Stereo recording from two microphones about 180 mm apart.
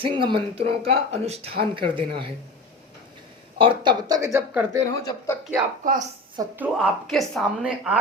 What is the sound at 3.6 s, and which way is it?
Speech, 25° right (ahead or behind).